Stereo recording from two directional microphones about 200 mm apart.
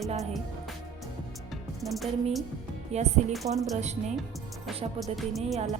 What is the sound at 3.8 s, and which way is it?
Speech, 35° right (ahead or behind).